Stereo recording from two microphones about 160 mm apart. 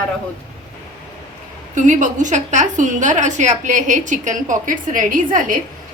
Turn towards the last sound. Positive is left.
turn(degrees=-55)  # may be behind; listen again after turning